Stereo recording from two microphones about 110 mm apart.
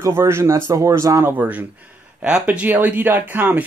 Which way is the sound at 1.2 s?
15° right (ahead or behind).